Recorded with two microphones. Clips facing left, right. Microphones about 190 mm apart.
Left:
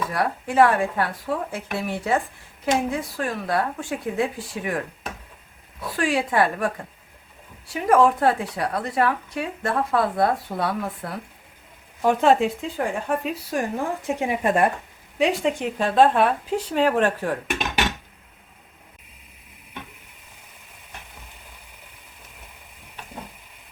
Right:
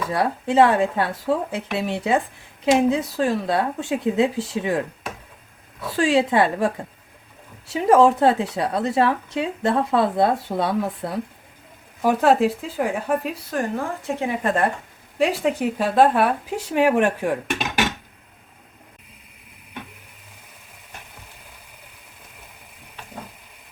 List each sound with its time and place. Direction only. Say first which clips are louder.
0.1 s a woman's voice: right 4 dB; 25° right (ahead or behind)
6.0 s a woman's voice: right 4 dB; 25° right (ahead or behind)
7.7 s a woman's voice: right 3 dB; 25° right (ahead or behind)
12.0 s speech: right 1 dB; centre (ahead or behind)
13.5 s speech: right 1 dB; 15° left (ahead or behind)
15.2 s speech: right 1 dB; centre (ahead or behind)